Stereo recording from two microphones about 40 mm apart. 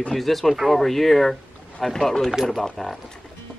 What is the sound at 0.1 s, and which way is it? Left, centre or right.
Speech, centre.